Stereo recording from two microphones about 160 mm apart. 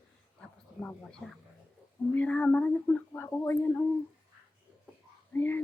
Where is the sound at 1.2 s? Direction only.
Centre (ahead or behind).